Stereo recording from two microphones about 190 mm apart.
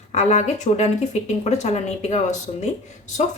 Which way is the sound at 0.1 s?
35° left (ahead or behind).